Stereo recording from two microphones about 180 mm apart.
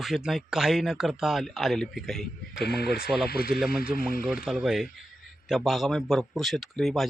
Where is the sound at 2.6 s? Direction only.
65° left (ahead or behind).